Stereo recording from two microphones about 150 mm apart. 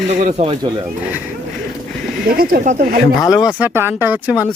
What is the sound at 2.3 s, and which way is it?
Speech, 75° right (ahead or behind).